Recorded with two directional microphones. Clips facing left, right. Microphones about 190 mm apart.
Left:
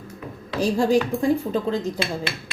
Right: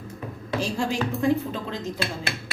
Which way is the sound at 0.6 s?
40° left (ahead or behind).